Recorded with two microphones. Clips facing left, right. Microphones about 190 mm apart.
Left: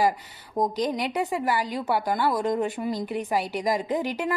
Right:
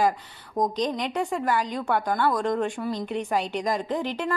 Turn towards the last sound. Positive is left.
turn(degrees=10)  # may be behind; listen again after turning